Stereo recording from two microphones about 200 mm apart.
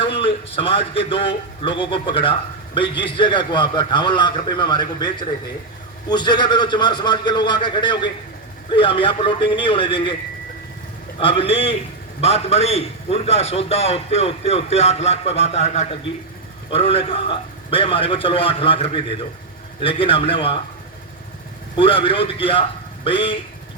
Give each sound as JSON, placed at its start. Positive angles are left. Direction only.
{"t": 0.0, "sound": "a man's voice", "side_deg": 25}
{"t": 11.2, "sound": "a man's voice", "side_deg": 25}
{"t": 21.8, "sound": "a man's voice", "side_deg": 25}